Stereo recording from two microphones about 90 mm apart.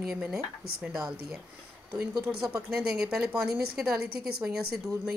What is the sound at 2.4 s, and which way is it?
Speech, 10° right (ahead or behind).